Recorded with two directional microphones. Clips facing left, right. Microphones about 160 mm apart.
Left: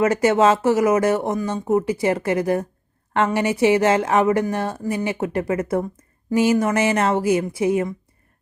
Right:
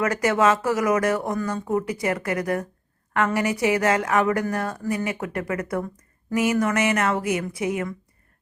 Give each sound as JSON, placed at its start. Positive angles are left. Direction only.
{"t": 0.0, "sound": "speech", "side_deg": 25}